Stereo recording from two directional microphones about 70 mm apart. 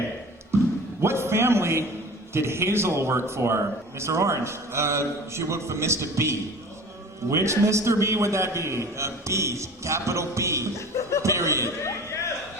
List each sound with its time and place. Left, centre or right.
1.0 s a sound: right
2.3 s a man's voice: right
10.8 s speech: left
11.2 s a man's voice: right